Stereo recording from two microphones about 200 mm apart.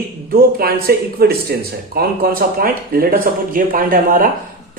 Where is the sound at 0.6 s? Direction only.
50° right (ahead or behind).